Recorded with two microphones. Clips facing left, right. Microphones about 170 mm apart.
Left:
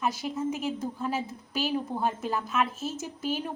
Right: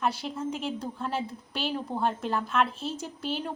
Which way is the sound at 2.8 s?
45° left (ahead or behind).